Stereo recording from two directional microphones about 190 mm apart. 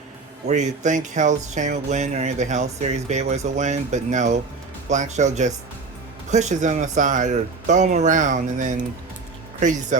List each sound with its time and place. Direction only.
0.4 s speech: 40° right (ahead or behind)